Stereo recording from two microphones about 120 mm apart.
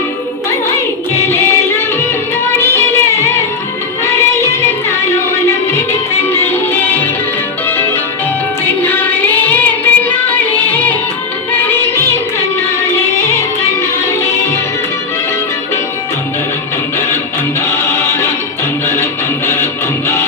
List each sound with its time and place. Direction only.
1.1 s music: 20° left (ahead or behind)
2.6 s music: 20° left (ahead or behind)
8.6 s music: 15° left (ahead or behind)
17.7 s music: 20° left (ahead or behind)